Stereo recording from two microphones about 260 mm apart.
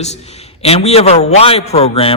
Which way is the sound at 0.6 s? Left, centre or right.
Left.